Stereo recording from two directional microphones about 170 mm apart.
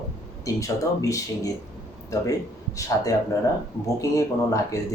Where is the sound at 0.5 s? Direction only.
20° left (ahead or behind).